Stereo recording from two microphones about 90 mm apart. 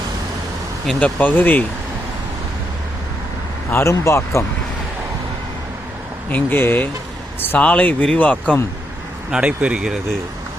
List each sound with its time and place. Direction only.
0.9 s speech: 15° left (ahead or behind)
3.7 s speech: 30° left (ahead or behind)
6.3 s speech: 20° left (ahead or behind)
9.3 s speech: 10° right (ahead or behind)